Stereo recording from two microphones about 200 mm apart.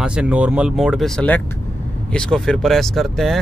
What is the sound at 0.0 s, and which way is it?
Speech, 5° right (ahead or behind).